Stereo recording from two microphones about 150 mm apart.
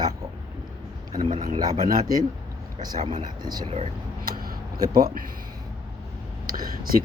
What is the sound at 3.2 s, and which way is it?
Speech, 25° right (ahead or behind).